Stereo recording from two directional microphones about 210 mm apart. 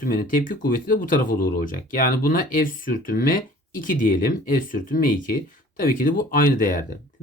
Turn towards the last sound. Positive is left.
turn(degrees=40)  # may be behind; listen again after turning